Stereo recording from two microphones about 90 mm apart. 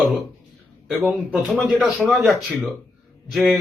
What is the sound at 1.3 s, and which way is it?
Speech, centre (ahead or behind).